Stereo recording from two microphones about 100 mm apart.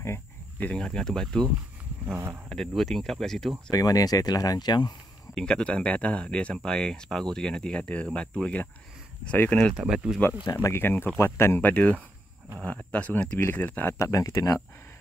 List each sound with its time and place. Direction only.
0.6 s speech: 10° left (ahead or behind)
2.0 s speech: 25° right (ahead or behind)
2.5 s speech: 5° left (ahead or behind)
3.7 s speech: 35° left (ahead or behind)
5.3 s speech: 10° left (ahead or behind)
9.8 s speech: 5° right (ahead or behind)
10.4 s speech: 40° left (ahead or behind)
10.7 s speech: 20° left (ahead or behind)
13.9 s speech: 35° left (ahead or behind)